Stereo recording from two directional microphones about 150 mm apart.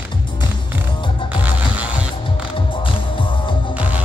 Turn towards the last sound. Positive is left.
turn(degrees=-10)  # may be behind; listen again after turning